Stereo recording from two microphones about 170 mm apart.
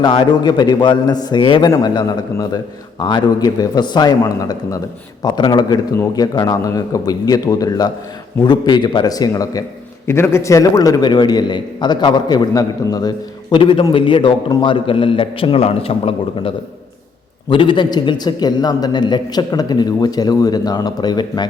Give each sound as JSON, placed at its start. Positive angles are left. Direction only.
{"t": 0.0, "sound": "a man's voice", "side_deg": 25}
{"t": 17.5, "sound": "a man's voice", "side_deg": 30}